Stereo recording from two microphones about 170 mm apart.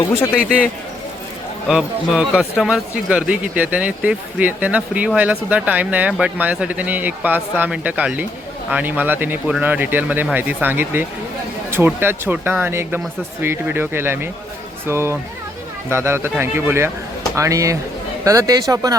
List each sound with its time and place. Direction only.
0.1 s a man's voice: 15° left (ahead or behind)
0.4 s speech: 5° right (ahead or behind)